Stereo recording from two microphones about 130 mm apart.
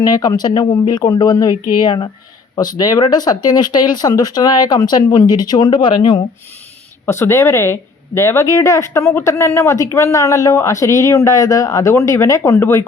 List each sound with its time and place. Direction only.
0.0 s speech: 30° left (ahead or behind)
7.0 s speech: 20° left (ahead or behind)